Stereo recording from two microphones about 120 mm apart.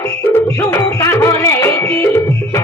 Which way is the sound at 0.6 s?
20° left (ahead or behind).